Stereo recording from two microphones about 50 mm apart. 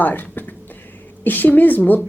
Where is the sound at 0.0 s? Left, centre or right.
Left.